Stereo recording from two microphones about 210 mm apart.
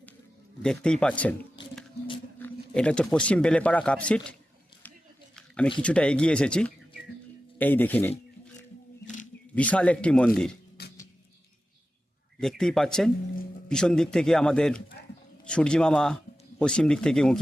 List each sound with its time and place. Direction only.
0.6 s speech: 5° left (ahead or behind)
2.4 s speech: 5° left (ahead or behind)
5.8 s speech: 5° left (ahead or behind)
9.6 s speech: 5° left (ahead or behind)
10.8 s a sound: 50° left (ahead or behind)
12.4 s speech: centre (ahead or behind)